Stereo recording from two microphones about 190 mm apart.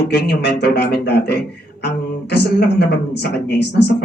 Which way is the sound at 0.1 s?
60° left (ahead or behind).